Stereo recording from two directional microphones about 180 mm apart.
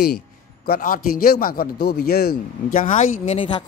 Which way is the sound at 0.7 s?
50° left (ahead or behind).